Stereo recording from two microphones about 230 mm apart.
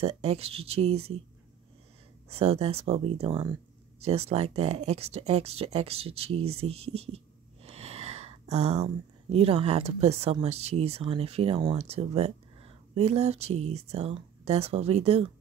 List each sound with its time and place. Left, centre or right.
0.0 s speech: right
2.2 s speech: right